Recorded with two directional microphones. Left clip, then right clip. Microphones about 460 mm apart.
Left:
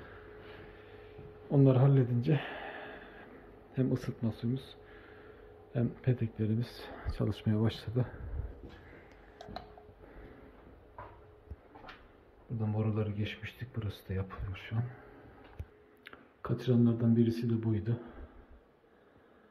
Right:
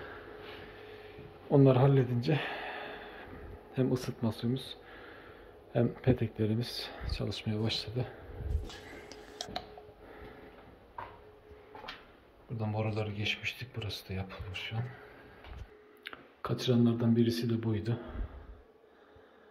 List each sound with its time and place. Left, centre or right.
0.9 s a sound: centre
3.7 s speech: centre
12.5 s speech: centre
16.0 s speech: centre